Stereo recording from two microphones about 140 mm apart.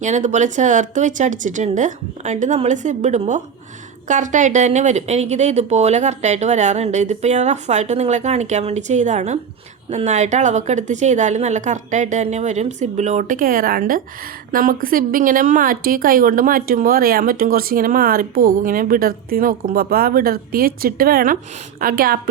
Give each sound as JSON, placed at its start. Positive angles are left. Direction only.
{"t": 0.0, "sound": "a woman's voice", "side_deg": -60}